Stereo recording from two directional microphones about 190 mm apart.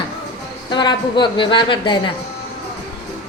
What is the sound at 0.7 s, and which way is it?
A woman's voice, 25° left (ahead or behind).